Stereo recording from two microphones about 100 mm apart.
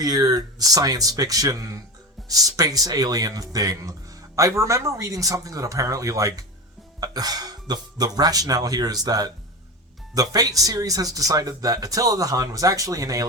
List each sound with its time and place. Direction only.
0.0 s speech: 40° right (ahead or behind)